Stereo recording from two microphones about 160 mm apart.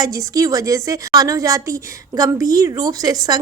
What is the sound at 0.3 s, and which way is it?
A woman's voice, 20° right (ahead or behind).